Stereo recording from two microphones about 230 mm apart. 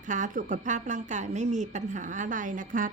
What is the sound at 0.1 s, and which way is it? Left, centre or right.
A woman's voice, right.